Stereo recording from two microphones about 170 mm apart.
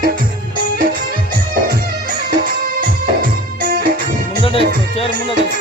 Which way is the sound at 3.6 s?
60° right (ahead or behind).